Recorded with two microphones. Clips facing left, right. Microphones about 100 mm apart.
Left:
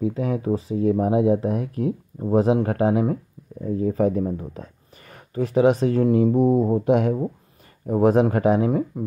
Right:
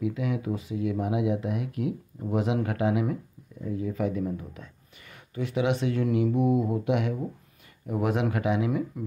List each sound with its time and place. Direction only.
0.0 s speech: 35° left (ahead or behind)